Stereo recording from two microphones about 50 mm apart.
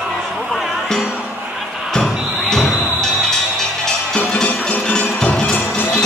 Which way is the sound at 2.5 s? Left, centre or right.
Centre.